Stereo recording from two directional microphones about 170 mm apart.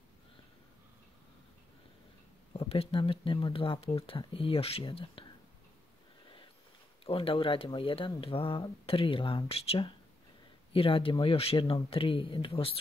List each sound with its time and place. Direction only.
2.5 s speech: 35° left (ahead or behind)
7.1 s speech: 35° left (ahead or behind)